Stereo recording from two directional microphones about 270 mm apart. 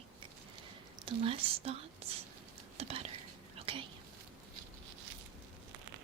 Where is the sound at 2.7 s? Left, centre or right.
Right.